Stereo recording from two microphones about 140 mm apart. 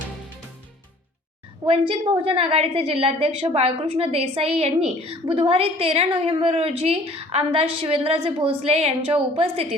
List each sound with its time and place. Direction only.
1.6 s a woman's voice: 40° right (ahead or behind)